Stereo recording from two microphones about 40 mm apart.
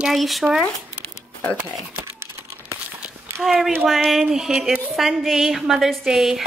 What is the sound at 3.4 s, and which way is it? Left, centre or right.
A woman's voice, centre.